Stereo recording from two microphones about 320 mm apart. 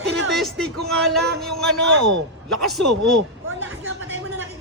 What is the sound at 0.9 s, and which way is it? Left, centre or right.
Speech, centre.